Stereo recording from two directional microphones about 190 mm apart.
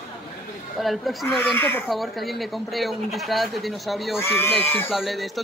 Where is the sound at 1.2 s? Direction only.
10° left (ahead or behind).